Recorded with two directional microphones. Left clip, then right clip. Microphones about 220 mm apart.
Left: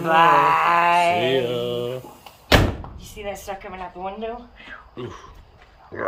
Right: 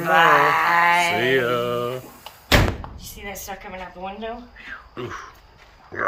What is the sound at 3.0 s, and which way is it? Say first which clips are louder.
Speech: left 3 dB; 20° left (ahead or behind).